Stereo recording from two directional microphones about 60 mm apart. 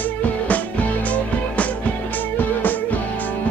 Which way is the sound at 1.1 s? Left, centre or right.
Left.